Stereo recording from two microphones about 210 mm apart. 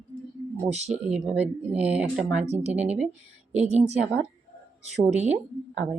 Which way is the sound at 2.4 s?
30° right (ahead or behind).